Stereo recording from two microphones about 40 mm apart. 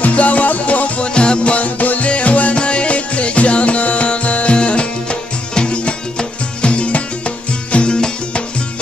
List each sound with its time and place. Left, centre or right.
0.0 s music: left